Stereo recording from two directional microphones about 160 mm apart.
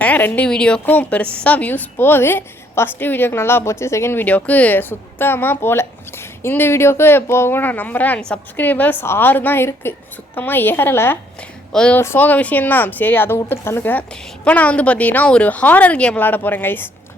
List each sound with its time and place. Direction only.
0.0 s speech: 10° left (ahead or behind)